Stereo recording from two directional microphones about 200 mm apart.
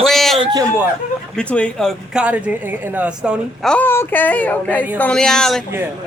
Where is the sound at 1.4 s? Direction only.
5° left (ahead or behind).